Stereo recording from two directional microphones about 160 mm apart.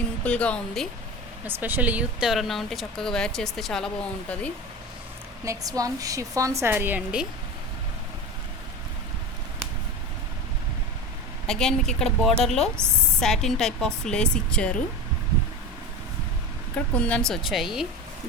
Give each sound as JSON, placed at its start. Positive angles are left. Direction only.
{"t": 0.3, "sound": "speech", "side_deg": 5}
{"t": 1.5, "sound": "speech", "side_deg": -10}
{"t": 5.5, "sound": "a woman's voice", "side_deg": -20}
{"t": 11.4, "sound": "speech", "side_deg": 5}
{"t": 16.7, "sound": "speech", "side_deg": 10}